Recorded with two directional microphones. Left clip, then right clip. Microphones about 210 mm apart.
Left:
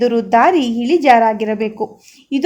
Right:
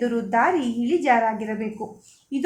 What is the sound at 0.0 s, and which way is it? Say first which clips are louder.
A woman's voice: left 9 dB; 40° left (ahead or behind).